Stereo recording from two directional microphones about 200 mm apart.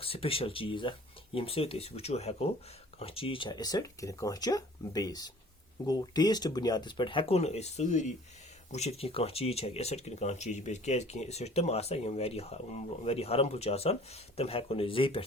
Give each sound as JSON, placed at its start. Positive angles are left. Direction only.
{"t": 0.0, "sound": "speech", "side_deg": 30}